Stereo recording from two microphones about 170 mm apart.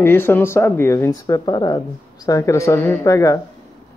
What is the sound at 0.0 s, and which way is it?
Speech, 10° left (ahead or behind).